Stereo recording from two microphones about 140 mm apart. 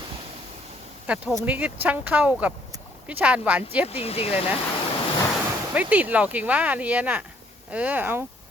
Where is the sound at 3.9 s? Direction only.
45° left (ahead or behind).